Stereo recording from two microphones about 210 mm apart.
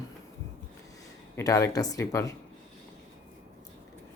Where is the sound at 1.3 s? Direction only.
15° left (ahead or behind).